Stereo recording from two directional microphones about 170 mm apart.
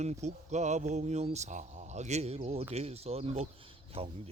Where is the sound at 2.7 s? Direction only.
40° right (ahead or behind).